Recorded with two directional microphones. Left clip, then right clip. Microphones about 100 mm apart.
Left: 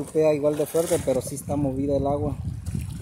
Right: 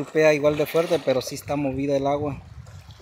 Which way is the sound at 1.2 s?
30° left (ahead or behind).